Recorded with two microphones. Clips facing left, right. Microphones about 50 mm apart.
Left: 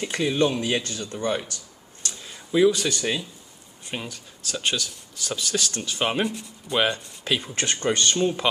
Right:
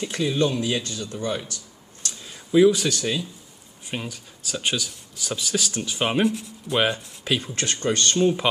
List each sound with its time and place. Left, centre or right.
0.0 s speech: centre
2.0 s a sound: centre
3.9 s speech: centre